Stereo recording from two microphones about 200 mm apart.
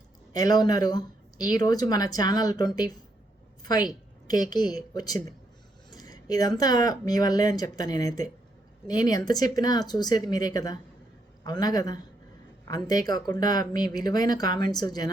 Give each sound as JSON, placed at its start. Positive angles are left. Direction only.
{"t": 0.3, "sound": "a woman's voice", "side_deg": 20}